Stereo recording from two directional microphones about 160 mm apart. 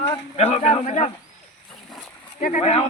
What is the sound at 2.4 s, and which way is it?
Speech, 50° left (ahead or behind).